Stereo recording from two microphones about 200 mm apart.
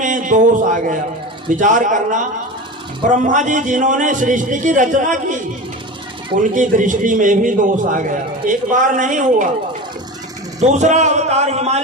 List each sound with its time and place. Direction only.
0.0 s a man's voice: 40° right (ahead or behind)
6.4 s a man's voice: 40° right (ahead or behind)
10.6 s a man's voice: 35° right (ahead or behind)